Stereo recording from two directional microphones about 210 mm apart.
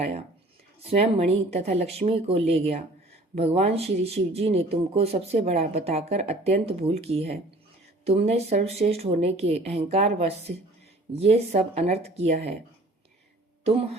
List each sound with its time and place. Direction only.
0.0 s speech: 30° right (ahead or behind)